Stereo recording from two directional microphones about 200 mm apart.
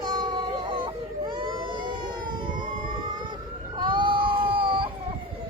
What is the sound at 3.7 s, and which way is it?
Baby cry, 25° right (ahead or behind).